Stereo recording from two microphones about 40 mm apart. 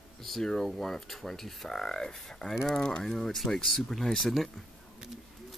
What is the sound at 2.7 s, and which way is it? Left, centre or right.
Speech, left.